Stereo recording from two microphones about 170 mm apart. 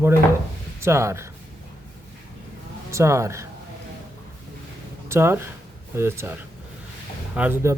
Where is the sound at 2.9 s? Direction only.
15° right (ahead or behind).